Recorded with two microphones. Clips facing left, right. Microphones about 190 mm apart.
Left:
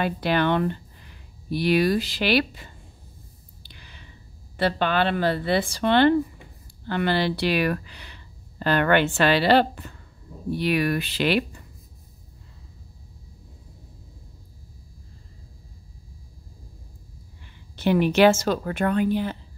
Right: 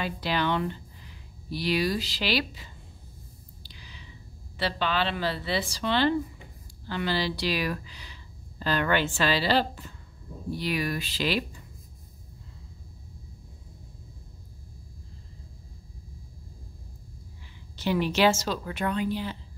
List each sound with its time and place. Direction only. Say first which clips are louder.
0.0 s speech: left 6 dB; 55° left (ahead or behind)
3.6 s a sound: left 1 dB; 55° left (ahead or behind)
4.6 s speech: left 6 dB; 50° left (ahead or behind)
17.7 s speech: left 6 dB; 55° left (ahead or behind)